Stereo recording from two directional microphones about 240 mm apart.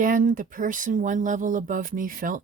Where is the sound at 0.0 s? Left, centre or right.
Right.